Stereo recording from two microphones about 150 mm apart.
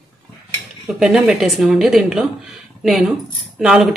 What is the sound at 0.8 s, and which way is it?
A woman's voice, 5° right (ahead or behind).